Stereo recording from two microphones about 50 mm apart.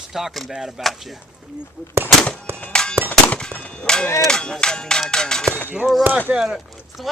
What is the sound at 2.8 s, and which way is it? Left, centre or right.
Music, centre.